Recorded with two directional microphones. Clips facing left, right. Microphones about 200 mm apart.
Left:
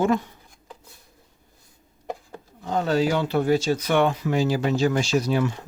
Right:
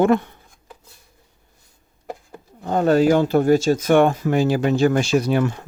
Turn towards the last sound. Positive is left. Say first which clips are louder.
# right 4 dB
turn(degrees=-55)  # may be behind; listen again after turning